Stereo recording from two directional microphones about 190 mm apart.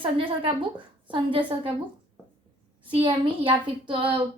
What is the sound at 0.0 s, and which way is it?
A woman's voice, 25° right (ahead or behind).